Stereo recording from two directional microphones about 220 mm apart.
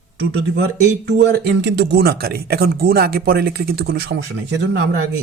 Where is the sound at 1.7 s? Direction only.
50° right (ahead or behind).